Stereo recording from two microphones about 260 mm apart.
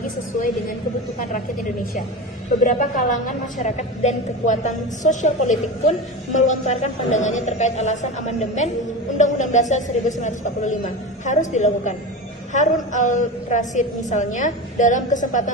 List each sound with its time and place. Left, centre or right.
2.6 s a woman's voice: left